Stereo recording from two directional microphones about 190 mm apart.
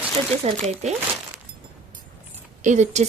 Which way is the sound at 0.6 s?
35° right (ahead or behind).